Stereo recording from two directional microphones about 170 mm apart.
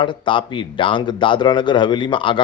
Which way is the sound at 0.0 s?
30° left (ahead or behind).